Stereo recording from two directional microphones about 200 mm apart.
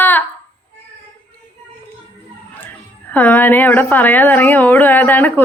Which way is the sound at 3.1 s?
5° left (ahead or behind).